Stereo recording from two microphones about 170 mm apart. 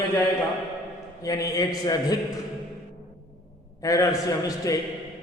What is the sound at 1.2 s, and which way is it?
Speech, 20° left (ahead or behind).